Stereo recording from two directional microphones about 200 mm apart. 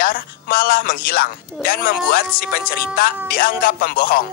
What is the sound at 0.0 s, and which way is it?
A woman's voice, 45° left (ahead or behind).